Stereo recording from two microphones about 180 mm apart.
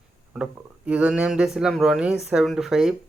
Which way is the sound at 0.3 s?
5° right (ahead or behind).